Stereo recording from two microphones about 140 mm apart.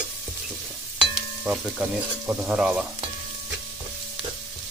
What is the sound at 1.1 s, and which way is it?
Sizzle, 10° right (ahead or behind).